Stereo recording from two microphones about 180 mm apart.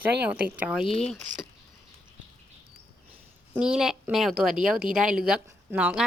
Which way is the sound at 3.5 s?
5° right (ahead or behind).